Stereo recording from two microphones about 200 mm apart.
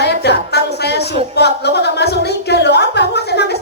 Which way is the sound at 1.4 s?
55° left (ahead or behind).